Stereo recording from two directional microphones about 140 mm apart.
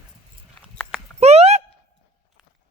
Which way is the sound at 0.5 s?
10° left (ahead or behind).